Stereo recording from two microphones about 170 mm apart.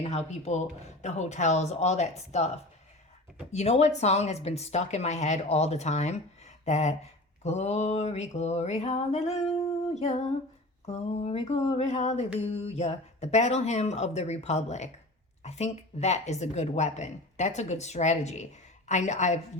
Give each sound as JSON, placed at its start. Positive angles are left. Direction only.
{"t": 0.1, "sound": "a woman's voice", "side_deg": 40}